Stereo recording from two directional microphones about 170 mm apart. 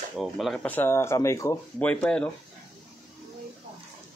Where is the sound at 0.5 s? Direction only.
10° left (ahead or behind).